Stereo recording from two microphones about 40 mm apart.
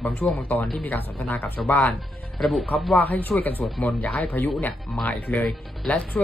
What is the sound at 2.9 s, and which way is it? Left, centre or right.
Speech, left.